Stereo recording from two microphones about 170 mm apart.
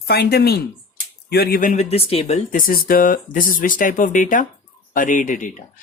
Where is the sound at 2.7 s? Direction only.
55° left (ahead or behind).